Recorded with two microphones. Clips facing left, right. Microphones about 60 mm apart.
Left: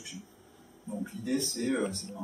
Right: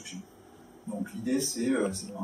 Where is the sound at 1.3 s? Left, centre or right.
Centre.